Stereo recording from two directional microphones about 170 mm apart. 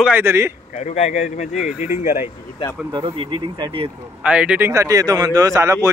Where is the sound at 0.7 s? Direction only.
40° left (ahead or behind).